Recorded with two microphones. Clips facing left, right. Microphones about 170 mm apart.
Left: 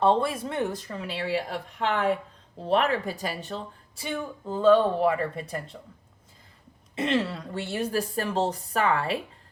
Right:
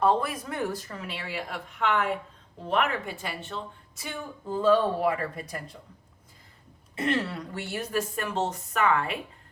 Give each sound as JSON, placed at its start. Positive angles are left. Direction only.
{"t": 0.0, "sound": "a woman's voice", "side_deg": 30}
{"t": 4.4, "sound": "speech", "side_deg": 0}
{"t": 4.7, "sound": "speech", "side_deg": 25}
{"t": 6.9, "sound": "a woman's voice", "side_deg": 25}